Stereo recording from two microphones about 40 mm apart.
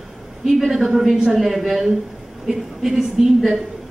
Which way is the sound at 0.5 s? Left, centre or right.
Centre.